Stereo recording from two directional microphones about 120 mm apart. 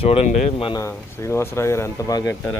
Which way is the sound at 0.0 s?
55° left (ahead or behind).